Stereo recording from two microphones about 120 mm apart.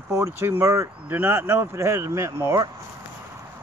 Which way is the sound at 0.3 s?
20° right (ahead or behind).